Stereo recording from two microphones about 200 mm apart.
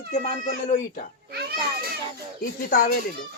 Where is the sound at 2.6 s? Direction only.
45° left (ahead or behind).